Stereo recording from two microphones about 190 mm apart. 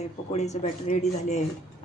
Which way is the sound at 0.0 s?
35° left (ahead or behind).